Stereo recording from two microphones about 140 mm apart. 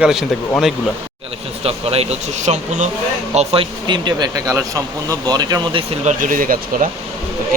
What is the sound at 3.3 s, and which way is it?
Speech, 40° right (ahead or behind).